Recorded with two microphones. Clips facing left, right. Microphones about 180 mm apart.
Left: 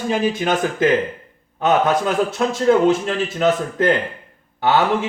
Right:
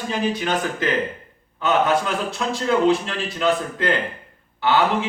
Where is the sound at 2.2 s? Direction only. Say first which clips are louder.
Left 6 dB; 45° left (ahead or behind).